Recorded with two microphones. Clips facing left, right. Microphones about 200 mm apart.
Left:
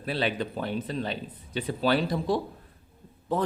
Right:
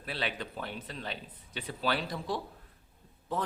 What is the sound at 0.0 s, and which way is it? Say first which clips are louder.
A man's voice: left 8 dB; 35° left (ahead or behind).